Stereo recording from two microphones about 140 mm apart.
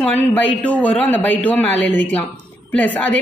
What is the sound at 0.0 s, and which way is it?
A man's voice, 10° left (ahead or behind).